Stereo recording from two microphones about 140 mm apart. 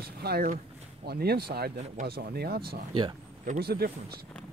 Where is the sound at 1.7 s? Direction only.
75° right (ahead or behind).